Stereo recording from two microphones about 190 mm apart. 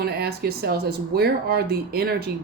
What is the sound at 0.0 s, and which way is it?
Speech, 55° right (ahead or behind).